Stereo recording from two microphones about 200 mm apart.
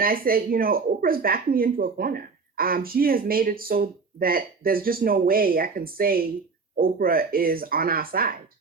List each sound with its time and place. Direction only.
0.0 s speech: 45° right (ahead or behind)